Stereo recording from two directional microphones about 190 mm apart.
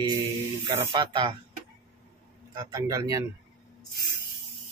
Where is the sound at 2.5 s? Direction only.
15° right (ahead or behind).